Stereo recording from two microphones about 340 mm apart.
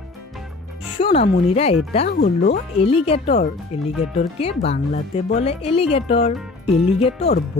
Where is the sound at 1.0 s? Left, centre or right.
Centre.